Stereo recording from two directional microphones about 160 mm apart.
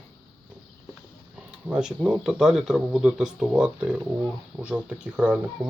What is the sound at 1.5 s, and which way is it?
Speech, 5° right (ahead or behind).